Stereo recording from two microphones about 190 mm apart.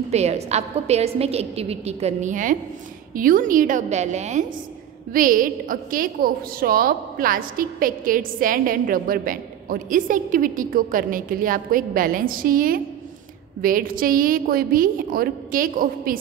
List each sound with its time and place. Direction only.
0.1 s a woman's voice: 35° right (ahead or behind)